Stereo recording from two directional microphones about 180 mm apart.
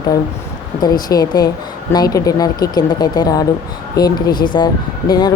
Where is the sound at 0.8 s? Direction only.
20° left (ahead or behind).